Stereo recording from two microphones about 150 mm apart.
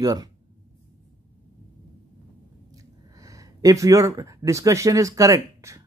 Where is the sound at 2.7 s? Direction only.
20° right (ahead or behind).